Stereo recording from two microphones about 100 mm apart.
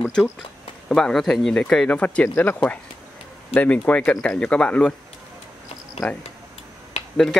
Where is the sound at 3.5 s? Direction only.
15° left (ahead or behind).